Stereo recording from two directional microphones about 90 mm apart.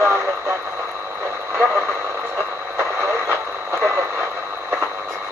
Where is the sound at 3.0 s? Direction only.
30° right (ahead or behind).